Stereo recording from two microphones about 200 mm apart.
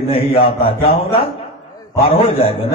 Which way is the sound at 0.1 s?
30° left (ahead or behind).